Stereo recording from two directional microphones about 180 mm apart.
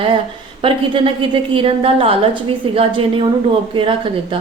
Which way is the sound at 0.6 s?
30° right (ahead or behind).